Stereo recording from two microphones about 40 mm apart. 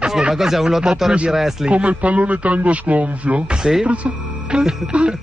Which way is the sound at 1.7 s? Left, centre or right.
Right.